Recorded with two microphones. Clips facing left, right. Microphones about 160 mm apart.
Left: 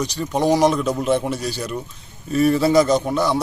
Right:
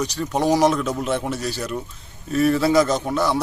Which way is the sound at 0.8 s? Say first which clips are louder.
Left 3 dB; 15° left (ahead or behind).